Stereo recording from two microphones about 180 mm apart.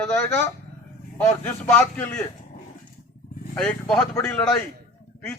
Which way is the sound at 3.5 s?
5° left (ahead or behind).